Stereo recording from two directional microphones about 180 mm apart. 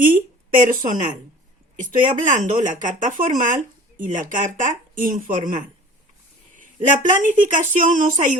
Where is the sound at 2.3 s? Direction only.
45° right (ahead or behind).